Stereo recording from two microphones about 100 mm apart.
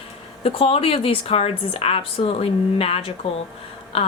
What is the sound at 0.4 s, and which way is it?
Speech, 70° left (ahead or behind).